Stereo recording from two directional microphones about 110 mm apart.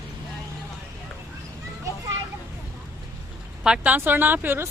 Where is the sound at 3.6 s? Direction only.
10° right (ahead or behind).